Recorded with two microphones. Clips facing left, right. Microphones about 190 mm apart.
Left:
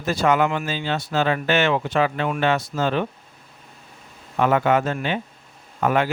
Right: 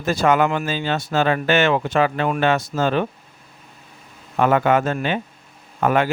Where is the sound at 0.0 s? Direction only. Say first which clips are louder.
Right 2 dB; 45° right (ahead or behind).